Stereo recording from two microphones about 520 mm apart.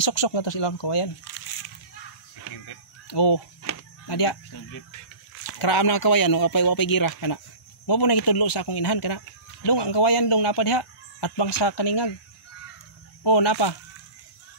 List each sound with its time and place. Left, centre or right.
0.0 s speech: left
2.6 s a sound: left
5.5 s speech: left
13.2 s speech: left